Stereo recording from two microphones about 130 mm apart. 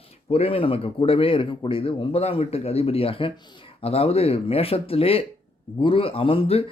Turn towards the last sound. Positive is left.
turn(degrees=45)  # may be behind; listen again after turning